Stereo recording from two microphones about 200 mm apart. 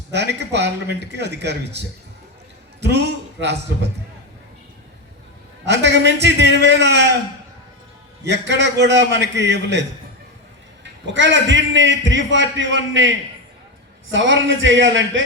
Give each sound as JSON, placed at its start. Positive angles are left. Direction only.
{"t": 0.1, "sound": "a man's voice", "side_deg": -60}
{"t": 2.8, "sound": "a man's voice", "side_deg": -55}
{"t": 5.6, "sound": "a man's voice", "side_deg": -60}
{"t": 8.2, "sound": "a man's voice", "side_deg": -60}
{"t": 11.0, "sound": "a man's voice", "side_deg": -65}